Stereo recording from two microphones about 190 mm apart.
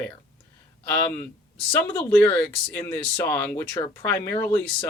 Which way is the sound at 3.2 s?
10° left (ahead or behind).